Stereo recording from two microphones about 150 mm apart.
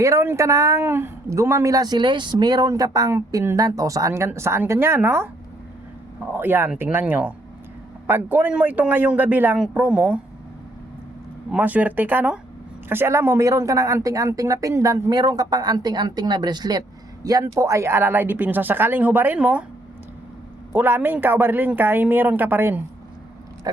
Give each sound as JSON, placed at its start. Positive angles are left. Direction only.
{"t": 0.0, "sound": "speech", "side_deg": -20}
{"t": 6.3, "sound": "speech", "side_deg": -15}
{"t": 11.5, "sound": "speech", "side_deg": -10}
{"t": 20.7, "sound": "speech", "side_deg": -15}